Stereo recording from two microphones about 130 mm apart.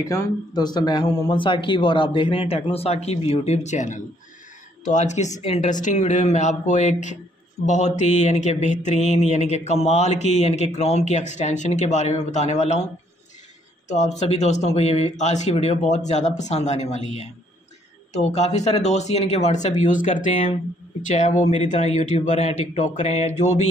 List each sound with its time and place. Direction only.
0.0 s a man's voice: 25° left (ahead or behind); by 5.3 s 65° left (ahead or behind)
5.4 s a woman's voice: 50° left (ahead or behind)
5.7 s speech: 75° left (ahead or behind)
13.8 s speech: 65° left (ahead or behind); by 20.4 s 80° left
21.1 s speech: 65° left (ahead or behind)